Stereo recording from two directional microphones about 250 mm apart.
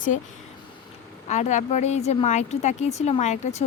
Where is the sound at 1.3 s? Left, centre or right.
Left.